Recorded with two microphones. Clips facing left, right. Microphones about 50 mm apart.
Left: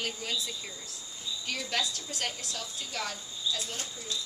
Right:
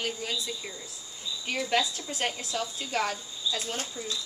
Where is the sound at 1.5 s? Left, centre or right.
Right.